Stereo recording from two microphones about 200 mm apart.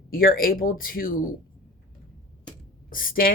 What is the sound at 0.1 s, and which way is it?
Speech, 45° left (ahead or behind).